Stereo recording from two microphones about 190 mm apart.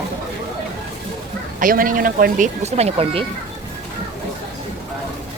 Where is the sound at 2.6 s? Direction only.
35° right (ahead or behind).